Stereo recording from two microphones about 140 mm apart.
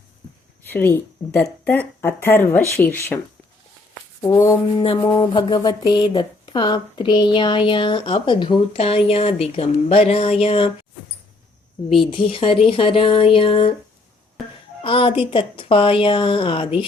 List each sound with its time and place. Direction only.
0.7 s speech: 15° left (ahead or behind)
4.2 s speech: 20° left (ahead or behind)
4.8 s speech: 40° left (ahead or behind)
11.9 s speech: 40° left (ahead or behind)
14.8 s speech: 40° left (ahead or behind)